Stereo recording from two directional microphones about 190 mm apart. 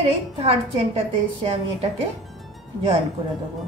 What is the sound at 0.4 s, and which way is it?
A woman's voice, 30° right (ahead or behind).